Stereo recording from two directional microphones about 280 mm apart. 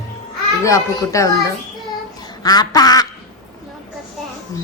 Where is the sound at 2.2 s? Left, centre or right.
Centre.